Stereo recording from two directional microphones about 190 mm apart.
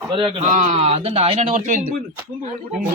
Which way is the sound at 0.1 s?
30° right (ahead or behind).